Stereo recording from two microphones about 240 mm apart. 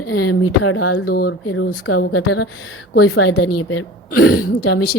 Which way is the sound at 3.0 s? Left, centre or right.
Left.